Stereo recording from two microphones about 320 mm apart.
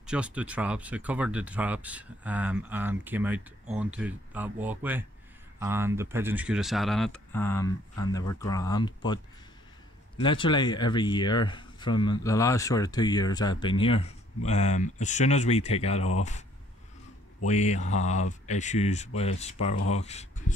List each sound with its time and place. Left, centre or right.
0.0 s speech: centre
17.5 s speech: left